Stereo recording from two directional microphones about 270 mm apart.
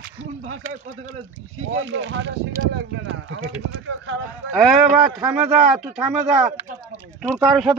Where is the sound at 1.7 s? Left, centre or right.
Right.